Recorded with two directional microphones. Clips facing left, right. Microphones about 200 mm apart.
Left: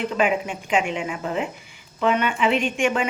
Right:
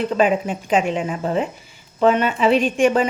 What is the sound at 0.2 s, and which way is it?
A woman's voice, 35° right (ahead or behind).